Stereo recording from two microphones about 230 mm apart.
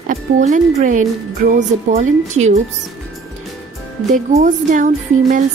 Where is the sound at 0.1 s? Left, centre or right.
Right.